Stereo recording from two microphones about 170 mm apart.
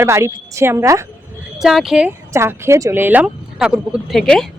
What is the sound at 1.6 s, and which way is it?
Speech, centre (ahead or behind).